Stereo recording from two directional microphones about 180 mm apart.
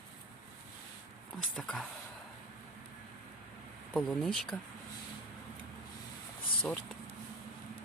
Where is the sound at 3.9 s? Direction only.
Centre (ahead or behind).